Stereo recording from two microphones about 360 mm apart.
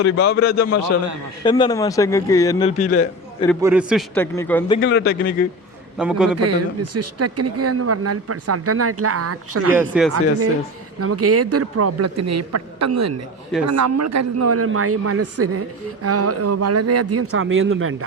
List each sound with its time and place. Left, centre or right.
0.0 s a man's voice: left
1.5 s a man's voice: centre
3.5 s a man's voice: centre
4.8 s a man's voice: left
6.0 s a man's voice: centre
6.3 s speech: right
9.7 s a man's voice: centre
11.0 s speech: right